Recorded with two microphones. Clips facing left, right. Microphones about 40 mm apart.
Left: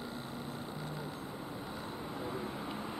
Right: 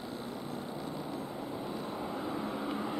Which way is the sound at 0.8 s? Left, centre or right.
Left.